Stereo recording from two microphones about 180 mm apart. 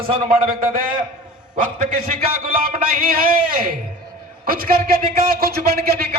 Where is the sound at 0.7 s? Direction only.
50° right (ahead or behind).